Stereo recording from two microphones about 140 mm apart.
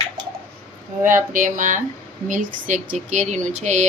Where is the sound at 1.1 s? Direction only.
70° right (ahead or behind).